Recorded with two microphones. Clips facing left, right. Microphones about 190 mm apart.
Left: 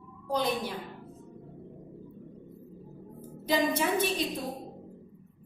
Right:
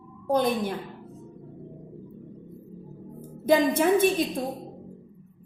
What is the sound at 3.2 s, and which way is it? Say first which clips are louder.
Speech: right 7 dB; 50° right (ahead or behind).